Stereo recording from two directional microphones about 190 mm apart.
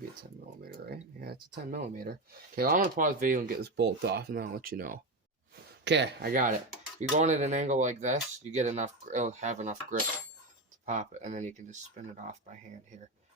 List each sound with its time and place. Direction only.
0.6 s speech: 55° right (ahead or behind)
5.8 s speech: 65° right (ahead or behind); by 6.5 s 50° right (ahead or behind)
7.2 s speech: 40° right (ahead or behind)